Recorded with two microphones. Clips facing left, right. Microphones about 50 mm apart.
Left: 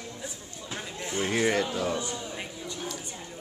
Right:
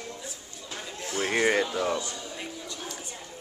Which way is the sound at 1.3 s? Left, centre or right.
Right.